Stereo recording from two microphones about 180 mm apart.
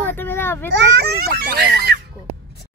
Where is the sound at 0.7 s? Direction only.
70° right (ahead or behind).